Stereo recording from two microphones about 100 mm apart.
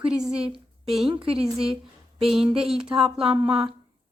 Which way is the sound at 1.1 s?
60° right (ahead or behind).